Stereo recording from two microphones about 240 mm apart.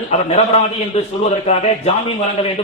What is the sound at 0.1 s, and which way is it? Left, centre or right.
A man's voice, left.